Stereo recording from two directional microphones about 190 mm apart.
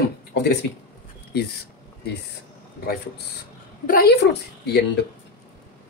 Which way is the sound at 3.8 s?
50° left (ahead or behind).